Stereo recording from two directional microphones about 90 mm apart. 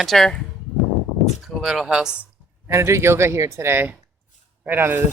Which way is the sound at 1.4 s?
Centre (ahead or behind).